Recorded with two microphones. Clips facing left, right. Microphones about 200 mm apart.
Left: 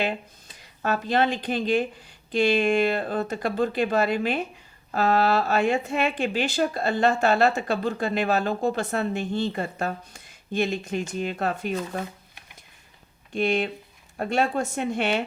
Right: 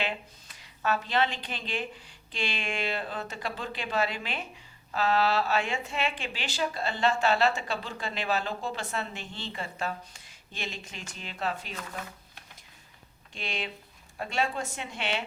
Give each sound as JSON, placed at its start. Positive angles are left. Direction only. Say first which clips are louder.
{"t": 0.8, "sound": "speech", "louder": "left 4 dB", "side_deg": 50}
{"t": 13.3, "sound": "speech", "louder": "left 13 dB", "side_deg": 55}